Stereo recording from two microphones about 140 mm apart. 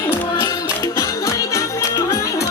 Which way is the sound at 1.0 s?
25° left (ahead or behind).